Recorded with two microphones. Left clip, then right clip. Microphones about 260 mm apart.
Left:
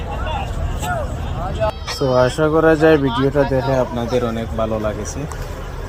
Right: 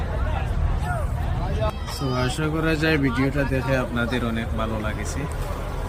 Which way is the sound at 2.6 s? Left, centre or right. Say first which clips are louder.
Left 11 dB; left.